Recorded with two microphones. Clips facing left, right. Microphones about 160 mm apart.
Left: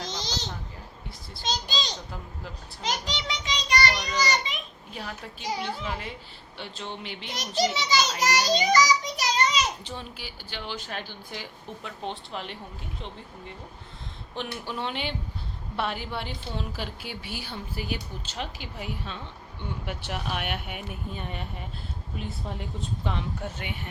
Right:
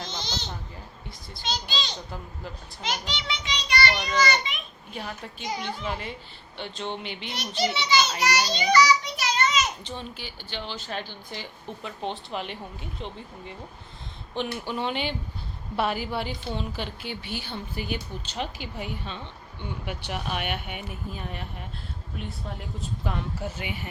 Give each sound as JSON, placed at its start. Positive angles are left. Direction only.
{"t": 0.0, "sound": "a sound", "side_deg": 40}
{"t": 1.4, "sound": "a child's voice", "side_deg": 40}
{"t": 4.9, "sound": "a woman's voice", "side_deg": 0}
{"t": 7.3, "sound": "a child's voice", "side_deg": 40}
{"t": 8.2, "sound": "child singing", "side_deg": 40}
{"t": 9.8, "sound": "a woman's voice", "side_deg": 5}
{"t": 14.3, "sound": "a woman's voice", "side_deg": 0}